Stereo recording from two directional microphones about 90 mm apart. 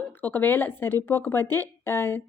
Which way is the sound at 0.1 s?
20° left (ahead or behind).